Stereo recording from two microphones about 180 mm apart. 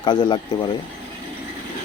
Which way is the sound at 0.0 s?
25° left (ahead or behind).